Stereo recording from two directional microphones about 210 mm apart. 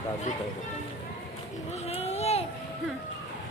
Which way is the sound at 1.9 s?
30° left (ahead or behind).